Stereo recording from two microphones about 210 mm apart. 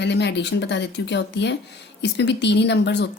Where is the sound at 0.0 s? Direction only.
55° left (ahead or behind).